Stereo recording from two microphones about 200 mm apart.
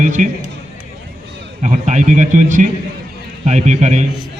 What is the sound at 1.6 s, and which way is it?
Speech, 35° right (ahead or behind).